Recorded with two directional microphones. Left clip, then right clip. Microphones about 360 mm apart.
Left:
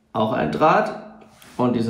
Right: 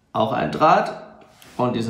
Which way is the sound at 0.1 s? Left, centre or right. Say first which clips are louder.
Even; centre.